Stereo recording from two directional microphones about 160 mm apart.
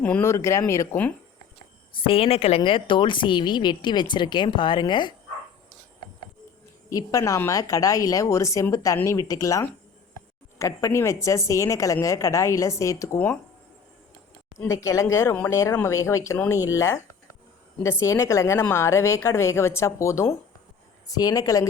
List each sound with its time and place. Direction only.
0.0 s a woman's voice: 10° left (ahead or behind)
2.0 s a woman's voice: 35° left (ahead or behind)
6.9 s a woman's voice: 20° left (ahead or behind)
14.7 s a woman's voice: 20° left (ahead or behind)